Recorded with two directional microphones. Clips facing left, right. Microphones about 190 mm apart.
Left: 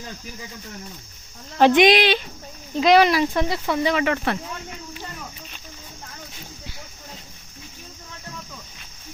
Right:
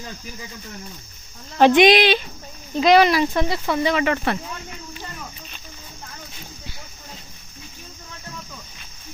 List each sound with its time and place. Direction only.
1.5 s speech: 30° right (ahead or behind)
2.7 s speech: 5° left (ahead or behind)